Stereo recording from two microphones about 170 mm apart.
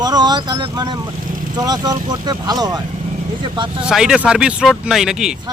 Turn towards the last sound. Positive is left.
turn(degrees=-5)  # may be behind; listen again after turning